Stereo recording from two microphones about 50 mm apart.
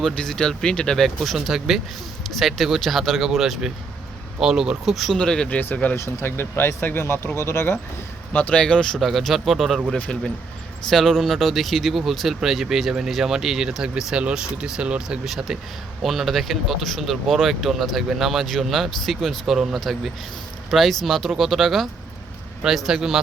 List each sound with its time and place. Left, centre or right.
0.2 s speech: centre
1.0 s speech: centre
5.1 s speech: centre
5.5 s speech: left
6.1 s speech: left
8.3 s speech: left
9.0 s speech: centre
10.8 s speech: centre
15.2 s speech: centre